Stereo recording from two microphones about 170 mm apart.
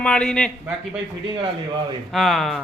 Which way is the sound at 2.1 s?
Centre (ahead or behind).